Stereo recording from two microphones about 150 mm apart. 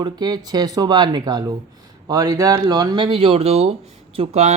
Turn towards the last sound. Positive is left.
turn(degrees=-45)  # may be behind; listen again after turning